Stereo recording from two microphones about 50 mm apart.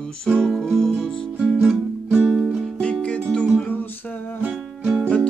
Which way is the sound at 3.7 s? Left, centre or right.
Left.